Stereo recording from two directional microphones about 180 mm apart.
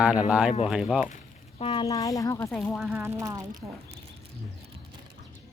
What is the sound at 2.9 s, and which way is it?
Speech, 10° right (ahead or behind).